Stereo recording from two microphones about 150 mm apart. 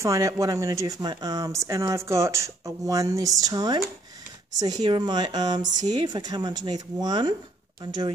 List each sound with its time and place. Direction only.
0.0 s speech: 20° right (ahead or behind)